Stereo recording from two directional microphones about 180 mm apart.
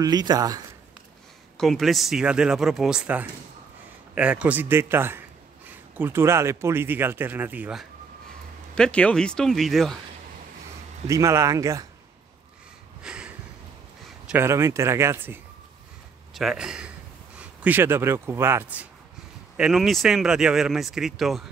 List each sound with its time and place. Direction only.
0.0 s speech: 20° right (ahead or behind)
1.6 s speech: centre (ahead or behind)
8.7 s speech: 5° left (ahead or behind)
11.1 s speech: 15° right (ahead or behind)
13.0 s a sound: 5° right (ahead or behind)
14.0 s a man's voice: 5° right (ahead or behind)